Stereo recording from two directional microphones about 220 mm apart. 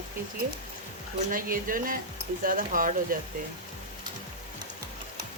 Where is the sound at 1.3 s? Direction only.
40° right (ahead or behind).